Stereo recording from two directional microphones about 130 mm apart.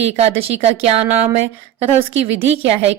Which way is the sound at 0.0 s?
55° right (ahead or behind).